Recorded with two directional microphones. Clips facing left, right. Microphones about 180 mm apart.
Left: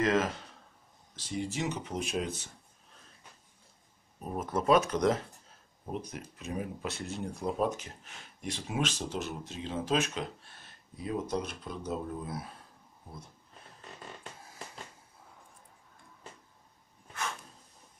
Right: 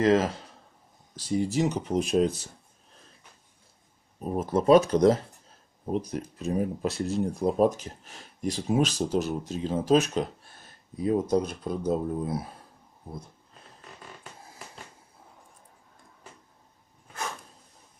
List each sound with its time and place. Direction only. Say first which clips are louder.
0.0 s speech: right 6 dB; 35° right (ahead or behind)
1.4 s speech: right 7 dB; 40° right (ahead or behind)
4.3 s speech: right 7 dB; 30° right (ahead or behind)